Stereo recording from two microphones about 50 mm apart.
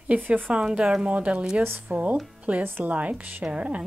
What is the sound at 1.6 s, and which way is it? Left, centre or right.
Speech, right.